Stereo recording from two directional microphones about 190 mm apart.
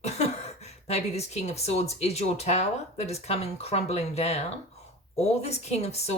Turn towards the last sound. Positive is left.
turn(degrees=35)  # may be behind; listen again after turning